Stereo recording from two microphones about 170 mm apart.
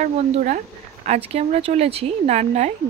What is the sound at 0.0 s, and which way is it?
Speech, 45° right (ahead or behind).